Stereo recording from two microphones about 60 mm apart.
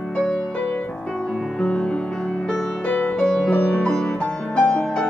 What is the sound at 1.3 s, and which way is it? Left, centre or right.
Music, centre.